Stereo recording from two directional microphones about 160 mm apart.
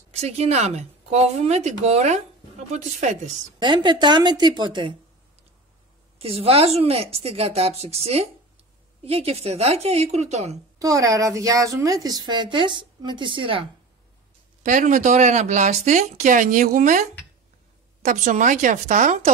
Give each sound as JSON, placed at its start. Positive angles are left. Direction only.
{"t": 0.1, "sound": "speech", "side_deg": -40}
{"t": 3.5, "sound": "a woman's voice", "side_deg": -30}
{"t": 6.1, "sound": "a woman's voice", "side_deg": -40}
{"t": 10.8, "sound": "a woman's voice", "side_deg": -20}
{"t": 14.6, "sound": "speech", "side_deg": -50}
{"t": 18.0, "sound": "speech", "side_deg": -50}